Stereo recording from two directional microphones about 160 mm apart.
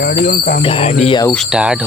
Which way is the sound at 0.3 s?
65° left (ahead or behind).